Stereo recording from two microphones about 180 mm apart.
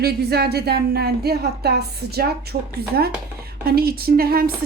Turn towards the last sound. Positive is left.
turn(degrees=-55)  # may be behind; listen again after turning